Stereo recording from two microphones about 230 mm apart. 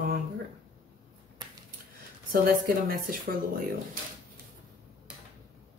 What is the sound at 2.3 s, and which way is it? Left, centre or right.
Speech, right.